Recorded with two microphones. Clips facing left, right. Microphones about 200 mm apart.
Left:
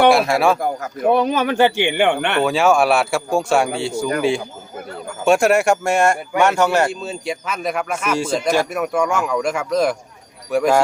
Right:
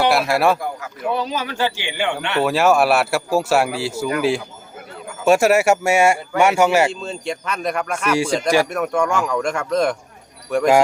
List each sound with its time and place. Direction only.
0.1 s speech: centre (ahead or behind)
0.6 s speech: 45° left (ahead or behind)
2.4 s speech: centre (ahead or behind)
7.0 s speech: 5° left (ahead or behind)